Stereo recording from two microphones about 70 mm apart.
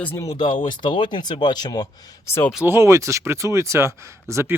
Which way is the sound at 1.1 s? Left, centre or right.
Left.